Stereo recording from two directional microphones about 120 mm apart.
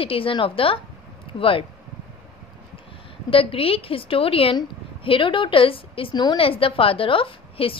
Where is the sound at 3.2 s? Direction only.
50° left (ahead or behind).